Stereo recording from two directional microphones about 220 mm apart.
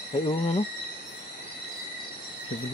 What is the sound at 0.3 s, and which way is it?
Cricket, 25° left (ahead or behind).